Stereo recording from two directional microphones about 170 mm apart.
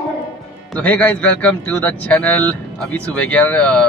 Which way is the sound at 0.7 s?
10° left (ahead or behind).